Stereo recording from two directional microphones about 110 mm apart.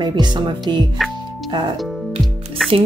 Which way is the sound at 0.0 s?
40° right (ahead or behind).